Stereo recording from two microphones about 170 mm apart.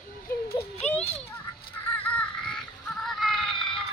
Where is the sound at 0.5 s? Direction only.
35° left (ahead or behind).